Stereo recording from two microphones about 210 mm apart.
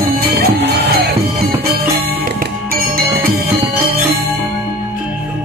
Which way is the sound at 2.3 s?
45° right (ahead or behind).